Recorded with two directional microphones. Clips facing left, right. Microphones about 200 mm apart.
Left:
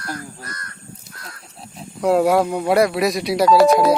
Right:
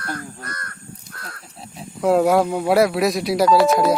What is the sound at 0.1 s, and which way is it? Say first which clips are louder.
Speech: even; 55° right (ahead or behind).